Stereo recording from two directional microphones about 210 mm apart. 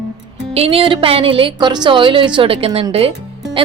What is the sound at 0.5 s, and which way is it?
A woman's voice, 30° right (ahead or behind).